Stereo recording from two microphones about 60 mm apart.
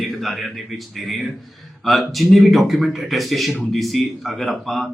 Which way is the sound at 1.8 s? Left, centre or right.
Centre.